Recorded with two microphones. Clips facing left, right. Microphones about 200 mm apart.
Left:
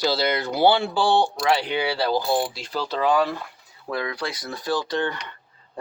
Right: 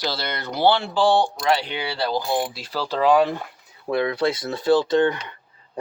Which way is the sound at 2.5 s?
5° right (ahead or behind).